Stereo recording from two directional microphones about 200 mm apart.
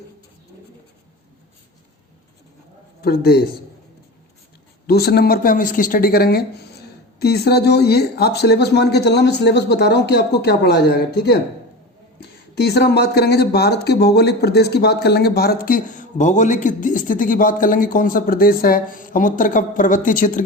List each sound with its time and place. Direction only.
3.0 s speech: 50° left (ahead or behind)
4.9 s speech: 50° left (ahead or behind)
12.5 s speech: 55° left (ahead or behind)